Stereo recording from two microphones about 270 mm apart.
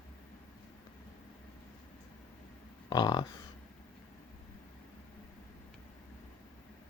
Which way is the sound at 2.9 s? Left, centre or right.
Centre.